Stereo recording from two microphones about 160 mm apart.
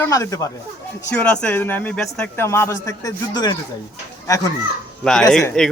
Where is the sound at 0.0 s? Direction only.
20° left (ahead or behind).